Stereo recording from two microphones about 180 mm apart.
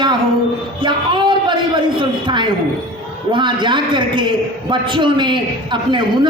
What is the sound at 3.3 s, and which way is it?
A man's voice, 25° right (ahead or behind).